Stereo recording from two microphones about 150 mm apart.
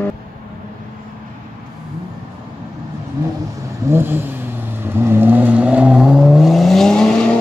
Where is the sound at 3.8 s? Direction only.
15° right (ahead or behind); by 7.1 s 5° left (ahead or behind).